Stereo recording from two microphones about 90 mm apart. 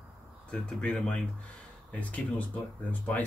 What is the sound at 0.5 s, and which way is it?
Speech, 10° left (ahead or behind).